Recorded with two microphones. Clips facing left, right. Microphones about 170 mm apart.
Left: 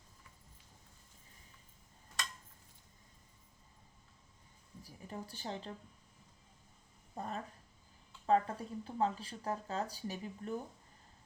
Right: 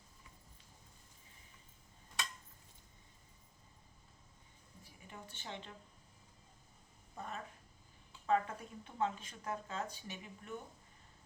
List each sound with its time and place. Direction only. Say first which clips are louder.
4.8 s speech: left 7 dB; 35° left (ahead or behind)
7.2 s speech: left 4 dB; 35° left (ahead or behind)